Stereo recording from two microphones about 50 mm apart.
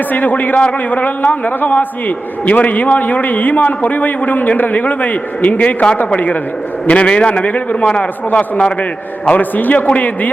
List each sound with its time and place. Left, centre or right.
0.1 s a man's voice: left